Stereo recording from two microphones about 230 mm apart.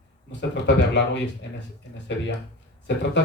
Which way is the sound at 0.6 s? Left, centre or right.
Left.